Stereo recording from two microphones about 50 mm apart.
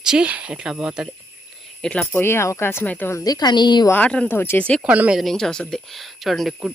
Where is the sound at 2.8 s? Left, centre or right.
Left.